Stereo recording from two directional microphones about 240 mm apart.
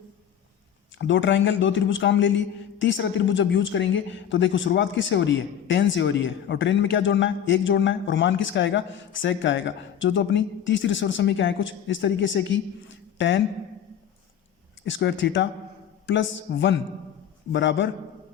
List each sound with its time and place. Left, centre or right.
0.9 s a woman's voice: left
14.8 s a woman's voice: left